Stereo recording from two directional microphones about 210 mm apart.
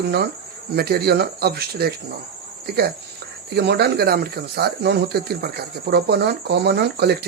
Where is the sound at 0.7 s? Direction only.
50° right (ahead or behind).